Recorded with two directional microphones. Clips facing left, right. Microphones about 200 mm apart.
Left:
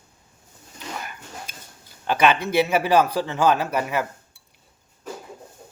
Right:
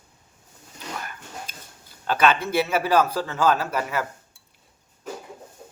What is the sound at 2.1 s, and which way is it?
Speech, 15° left (ahead or behind).